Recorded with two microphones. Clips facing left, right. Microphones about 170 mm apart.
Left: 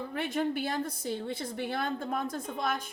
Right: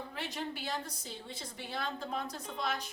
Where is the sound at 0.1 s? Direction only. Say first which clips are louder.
Left 13 dB; 55° left (ahead or behind).